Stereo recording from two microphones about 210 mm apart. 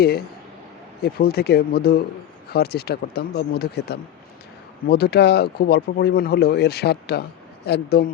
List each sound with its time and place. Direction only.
0.0 s speech: 50° left (ahead or behind)